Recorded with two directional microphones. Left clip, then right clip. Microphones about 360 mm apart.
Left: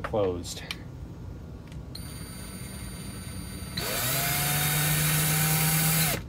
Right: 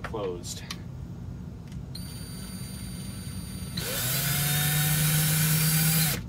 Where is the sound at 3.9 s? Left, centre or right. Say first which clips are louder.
Left 2 dB; centre.